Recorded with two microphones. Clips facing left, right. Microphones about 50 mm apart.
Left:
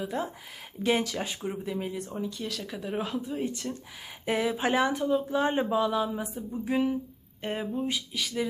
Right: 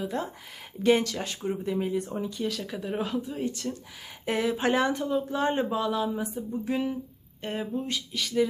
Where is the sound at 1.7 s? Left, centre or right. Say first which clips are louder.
Right 5 dB; centre.